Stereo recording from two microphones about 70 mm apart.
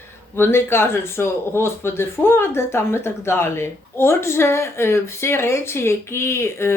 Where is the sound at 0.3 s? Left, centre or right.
Left.